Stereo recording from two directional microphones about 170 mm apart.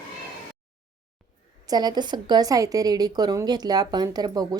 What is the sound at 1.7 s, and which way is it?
A woman's voice, 25° right (ahead or behind).